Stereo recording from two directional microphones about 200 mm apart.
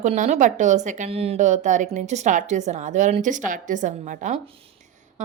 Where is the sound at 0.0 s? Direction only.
35° right (ahead or behind).